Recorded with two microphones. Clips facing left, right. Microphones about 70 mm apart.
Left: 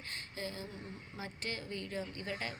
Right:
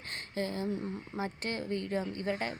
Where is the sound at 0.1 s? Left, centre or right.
Right.